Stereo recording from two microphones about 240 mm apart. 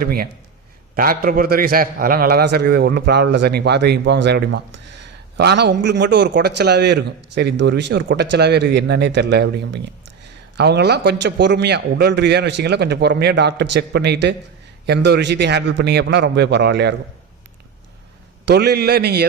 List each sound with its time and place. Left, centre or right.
0.0 s a man's voice: right
18.4 s a man's voice: right